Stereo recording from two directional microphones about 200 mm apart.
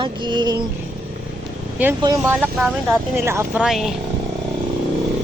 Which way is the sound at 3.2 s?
15° right (ahead or behind).